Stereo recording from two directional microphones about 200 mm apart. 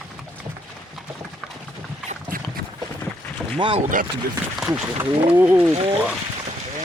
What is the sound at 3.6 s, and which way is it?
Speech, 25° right (ahead or behind).